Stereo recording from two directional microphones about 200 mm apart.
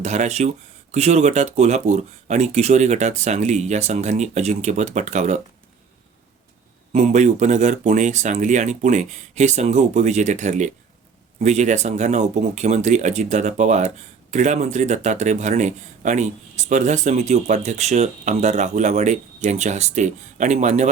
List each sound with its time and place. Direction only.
0.0 s speech: 35° right (ahead or behind)
6.9 s speech: 35° right (ahead or behind)